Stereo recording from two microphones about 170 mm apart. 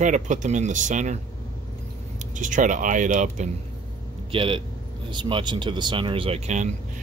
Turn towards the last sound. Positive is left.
turn(degrees=-40)  # may be behind; listen again after turning